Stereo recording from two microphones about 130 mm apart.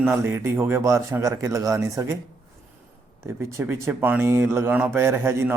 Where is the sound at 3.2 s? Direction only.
20° right (ahead or behind).